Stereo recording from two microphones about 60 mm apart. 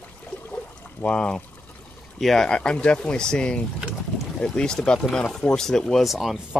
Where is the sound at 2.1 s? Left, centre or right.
Centre.